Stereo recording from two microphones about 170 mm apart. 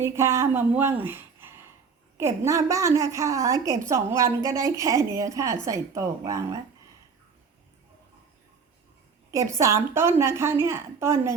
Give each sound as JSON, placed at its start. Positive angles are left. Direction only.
{"t": 0.0, "sound": "a woman's voice", "side_deg": -15}
{"t": 9.3, "sound": "a woman's voice", "side_deg": -15}